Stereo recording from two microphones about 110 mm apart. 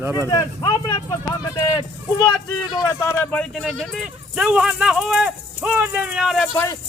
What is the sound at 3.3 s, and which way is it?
Speech, 5° left (ahead or behind).